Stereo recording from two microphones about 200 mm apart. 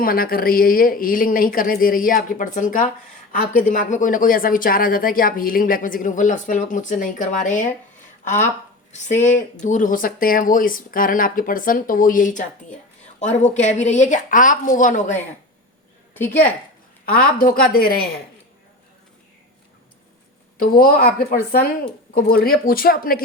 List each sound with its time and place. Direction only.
0.0 s speech: 45° left (ahead or behind)
16.1 s a woman's voice: 10° left (ahead or behind)
17.3 s speech: 45° left (ahead or behind)
20.6 s speech: 45° left (ahead or behind)